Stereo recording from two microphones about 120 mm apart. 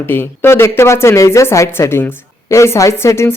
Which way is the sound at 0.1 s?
20° left (ahead or behind).